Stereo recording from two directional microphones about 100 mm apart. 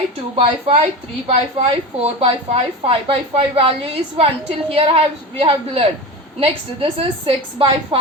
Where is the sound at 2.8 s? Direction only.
70° right (ahead or behind).